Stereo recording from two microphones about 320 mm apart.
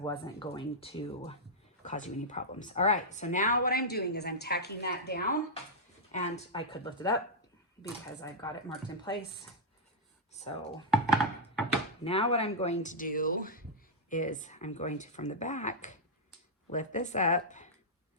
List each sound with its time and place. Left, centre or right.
0.0 s speech: centre
10.3 s speech: centre
10.9 s thunk: centre
12.0 s speech: centre